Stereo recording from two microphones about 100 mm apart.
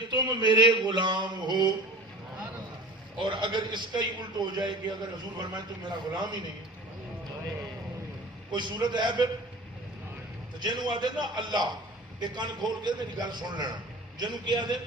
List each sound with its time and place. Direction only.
0.1 s a man's voice: 50° right (ahead or behind)
3.2 s a man's voice: 50° right (ahead or behind)
8.5 s a man's voice: 50° right (ahead or behind)
10.6 s a man's voice: 45° right (ahead or behind)